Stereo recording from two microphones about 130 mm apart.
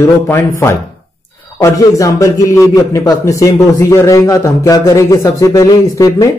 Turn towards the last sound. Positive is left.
turn(degrees=25)  # may be behind; listen again after turning